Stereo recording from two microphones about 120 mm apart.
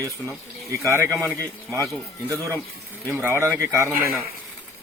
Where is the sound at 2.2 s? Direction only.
25° right (ahead or behind).